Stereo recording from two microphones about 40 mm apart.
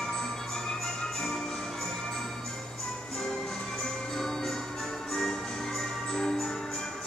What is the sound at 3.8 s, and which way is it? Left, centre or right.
Music, centre.